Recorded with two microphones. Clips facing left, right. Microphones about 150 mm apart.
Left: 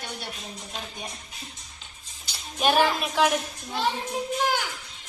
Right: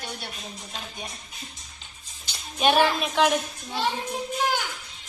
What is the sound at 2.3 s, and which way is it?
A woman's voice, centre (ahead or behind).